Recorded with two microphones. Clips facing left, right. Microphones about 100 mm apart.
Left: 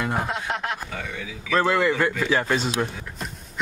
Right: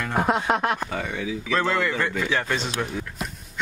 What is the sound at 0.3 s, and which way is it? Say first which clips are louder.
Speech: right 6 dB; 50° right (ahead or behind).